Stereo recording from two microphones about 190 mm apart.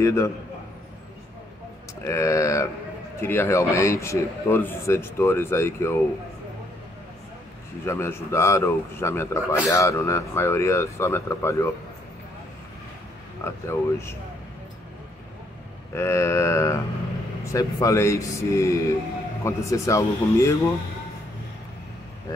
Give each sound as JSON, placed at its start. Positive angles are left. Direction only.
{"t": 0.0, "sound": "speech", "side_deg": 15}
{"t": 2.0, "sound": "speech", "side_deg": 15}
{"t": 7.8, "sound": "speech", "side_deg": 15}
{"t": 13.7, "sound": "speech", "side_deg": 15}
{"t": 15.9, "sound": "speech", "side_deg": 15}